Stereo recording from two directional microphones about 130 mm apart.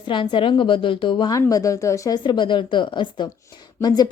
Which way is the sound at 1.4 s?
25° left (ahead or behind).